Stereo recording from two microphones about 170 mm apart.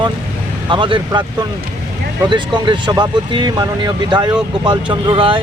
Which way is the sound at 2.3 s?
25° right (ahead or behind).